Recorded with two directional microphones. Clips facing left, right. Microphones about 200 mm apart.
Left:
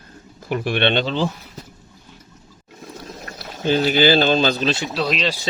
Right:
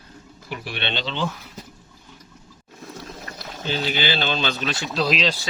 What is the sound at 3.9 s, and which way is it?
Speech, 45° left (ahead or behind).